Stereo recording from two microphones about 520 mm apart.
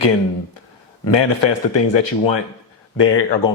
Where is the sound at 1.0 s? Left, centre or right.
Left.